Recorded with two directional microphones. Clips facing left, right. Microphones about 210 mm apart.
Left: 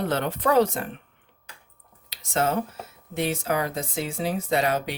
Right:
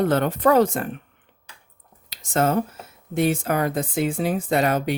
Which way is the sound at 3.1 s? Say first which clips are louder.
Right 4 dB; 50° right (ahead or behind).